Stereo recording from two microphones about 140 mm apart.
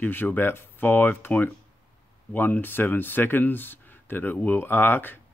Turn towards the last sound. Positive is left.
turn(degrees=15)  # may be behind; listen again after turning